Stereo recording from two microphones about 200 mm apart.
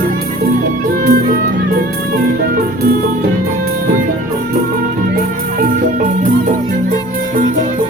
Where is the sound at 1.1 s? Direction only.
45° right (ahead or behind).